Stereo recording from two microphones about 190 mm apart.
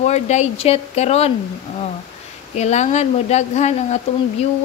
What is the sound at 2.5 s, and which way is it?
A woman's voice, 35° left (ahead or behind).